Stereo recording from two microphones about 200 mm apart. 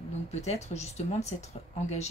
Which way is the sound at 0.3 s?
35° left (ahead or behind).